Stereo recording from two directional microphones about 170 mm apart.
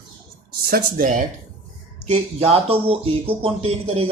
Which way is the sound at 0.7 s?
50° right (ahead or behind).